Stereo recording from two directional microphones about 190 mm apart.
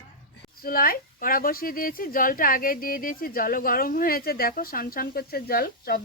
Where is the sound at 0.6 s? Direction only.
50° left (ahead or behind).